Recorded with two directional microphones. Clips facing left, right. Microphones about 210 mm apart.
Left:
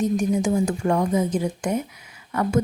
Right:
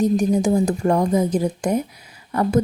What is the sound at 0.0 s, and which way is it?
A woman's voice, 35° right (ahead or behind).